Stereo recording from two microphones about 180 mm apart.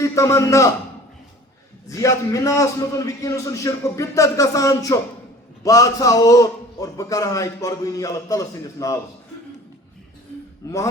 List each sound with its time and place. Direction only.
0.0 s a man's voice: 15° left (ahead or behind)
1.9 s a man's voice: 20° left (ahead or behind)
10.6 s a man's voice: 15° left (ahead or behind)